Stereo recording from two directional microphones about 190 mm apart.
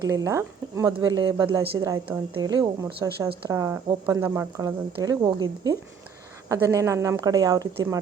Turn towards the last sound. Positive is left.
turn(degrees=-20)  # may be behind; listen again after turning